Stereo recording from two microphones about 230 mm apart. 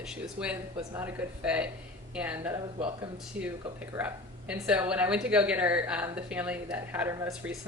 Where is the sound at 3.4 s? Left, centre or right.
Right.